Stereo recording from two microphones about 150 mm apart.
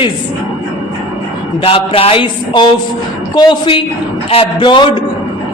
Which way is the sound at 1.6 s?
40° left (ahead or behind).